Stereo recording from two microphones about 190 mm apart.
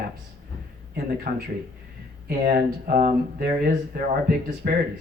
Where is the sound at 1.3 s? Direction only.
45° right (ahead or behind).